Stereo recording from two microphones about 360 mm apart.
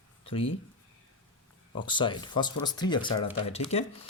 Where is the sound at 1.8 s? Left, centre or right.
Centre.